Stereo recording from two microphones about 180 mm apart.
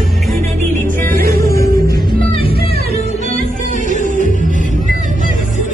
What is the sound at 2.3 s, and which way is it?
Music, 30° left (ahead or behind).